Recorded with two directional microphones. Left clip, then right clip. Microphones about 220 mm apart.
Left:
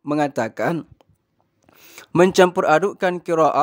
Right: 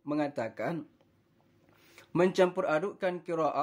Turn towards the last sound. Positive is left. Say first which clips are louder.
# left 13 dB
turn(degrees=50)  # may be behind; listen again after turning